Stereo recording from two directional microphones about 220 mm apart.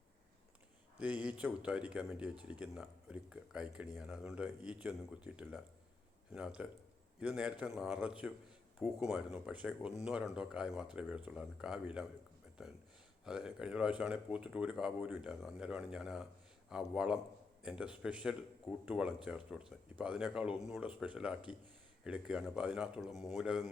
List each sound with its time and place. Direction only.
0.9 s a man's voice: 5° right (ahead or behind)